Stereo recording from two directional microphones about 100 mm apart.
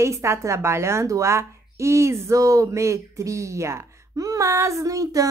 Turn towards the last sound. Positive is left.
turn(degrees=-35)  # may be behind; listen again after turning